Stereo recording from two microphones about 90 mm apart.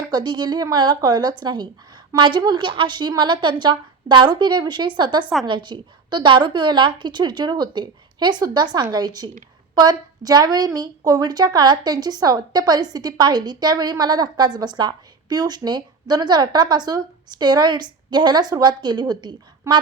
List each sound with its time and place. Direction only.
0.1 s a woman's voice: 55° right (ahead or behind)